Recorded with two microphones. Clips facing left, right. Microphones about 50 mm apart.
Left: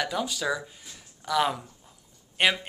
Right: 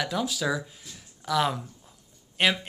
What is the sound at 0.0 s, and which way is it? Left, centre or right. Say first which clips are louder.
A man's voice: right 1 dB; centre.